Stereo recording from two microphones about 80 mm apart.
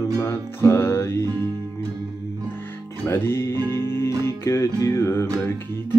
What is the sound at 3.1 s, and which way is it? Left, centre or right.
Music, left.